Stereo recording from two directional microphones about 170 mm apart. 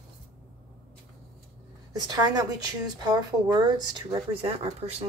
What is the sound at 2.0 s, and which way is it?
A woman's voice, 25° right (ahead or behind).